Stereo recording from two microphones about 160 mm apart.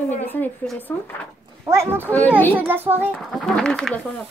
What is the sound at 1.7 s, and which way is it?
Speech, 15° right (ahead or behind).